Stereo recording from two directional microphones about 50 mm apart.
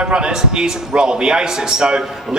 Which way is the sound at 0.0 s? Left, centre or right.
Centre.